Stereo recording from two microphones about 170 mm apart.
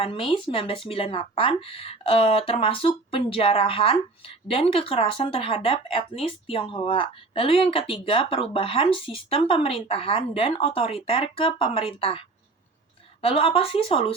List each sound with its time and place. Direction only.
0.0 s speech: 30° left (ahead or behind)
13.2 s speech: 30° left (ahead or behind)